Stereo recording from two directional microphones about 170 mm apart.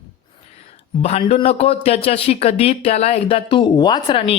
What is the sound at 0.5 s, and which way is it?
A man's voice, 40° left (ahead or behind).